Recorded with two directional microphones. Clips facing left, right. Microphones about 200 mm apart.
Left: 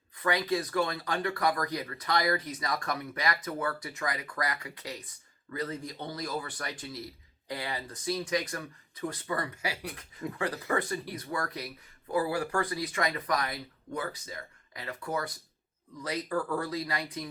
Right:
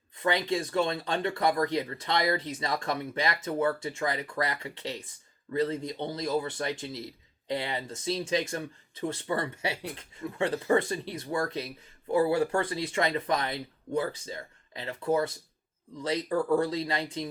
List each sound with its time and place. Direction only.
0.2 s speech: 25° right (ahead or behind)